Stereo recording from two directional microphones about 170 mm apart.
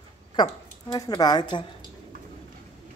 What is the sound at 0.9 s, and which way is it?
Speech, 25° left (ahead or behind).